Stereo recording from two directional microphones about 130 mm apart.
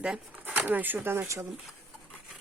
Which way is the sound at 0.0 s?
10° right (ahead or behind).